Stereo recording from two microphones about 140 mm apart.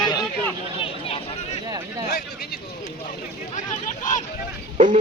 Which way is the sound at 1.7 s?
30° right (ahead or behind).